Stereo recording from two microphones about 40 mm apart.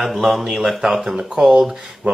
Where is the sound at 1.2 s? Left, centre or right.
Centre.